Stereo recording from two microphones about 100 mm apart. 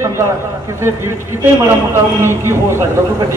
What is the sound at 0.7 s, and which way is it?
Speech, 25° right (ahead or behind).